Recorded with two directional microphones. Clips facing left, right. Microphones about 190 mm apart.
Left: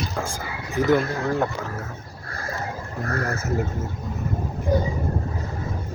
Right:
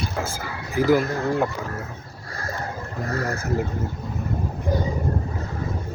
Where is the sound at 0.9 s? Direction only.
5° right (ahead or behind).